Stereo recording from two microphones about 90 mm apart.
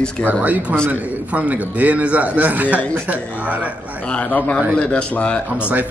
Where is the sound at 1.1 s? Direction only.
15° right (ahead or behind).